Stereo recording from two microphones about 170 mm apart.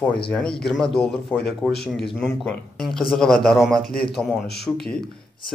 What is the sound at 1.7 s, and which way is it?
Speech, 75° left (ahead or behind).